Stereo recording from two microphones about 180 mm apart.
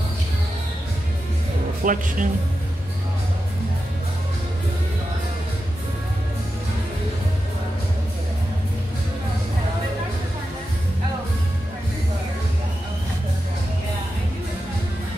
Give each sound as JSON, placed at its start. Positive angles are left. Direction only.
{"t": 1.9, "sound": "speech", "side_deg": -45}